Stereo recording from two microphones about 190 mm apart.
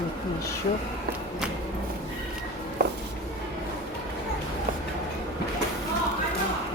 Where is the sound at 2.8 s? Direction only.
60° right (ahead or behind).